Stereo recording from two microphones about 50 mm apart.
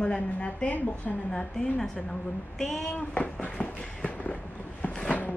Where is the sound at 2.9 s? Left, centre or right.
Left.